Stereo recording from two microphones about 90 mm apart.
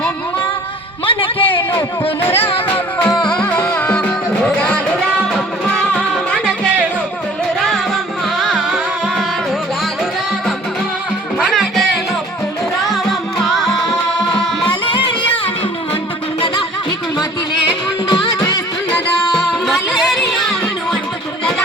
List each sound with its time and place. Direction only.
1.0 s a sound: 75° left (ahead or behind)
3.2 s music: 10° left (ahead or behind)
8.4 s music: centre (ahead or behind)
11.3 s music: centre (ahead or behind)
12.9 s music: centre (ahead or behind)
18.1 s music: 60° left (ahead or behind)
19.4 s music: centre (ahead or behind)